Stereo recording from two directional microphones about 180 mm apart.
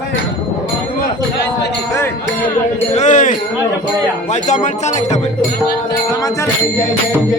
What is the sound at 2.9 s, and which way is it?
Speech, 40° left (ahead or behind).